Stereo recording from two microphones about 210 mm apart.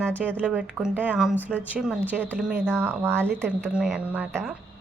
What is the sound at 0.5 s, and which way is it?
A woman's voice, 5° right (ahead or behind).